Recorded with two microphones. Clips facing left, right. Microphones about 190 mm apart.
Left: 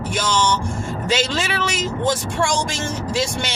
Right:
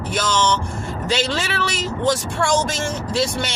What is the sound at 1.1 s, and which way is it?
Speech, 15° left (ahead or behind).